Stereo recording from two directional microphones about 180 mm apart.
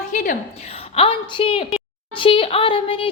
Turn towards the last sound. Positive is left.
turn(degrees=30)  # may be behind; listen again after turning